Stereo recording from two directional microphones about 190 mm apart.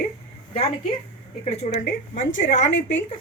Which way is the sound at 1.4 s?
35° left (ahead or behind).